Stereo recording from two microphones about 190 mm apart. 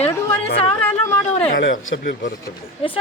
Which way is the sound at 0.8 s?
10° left (ahead or behind).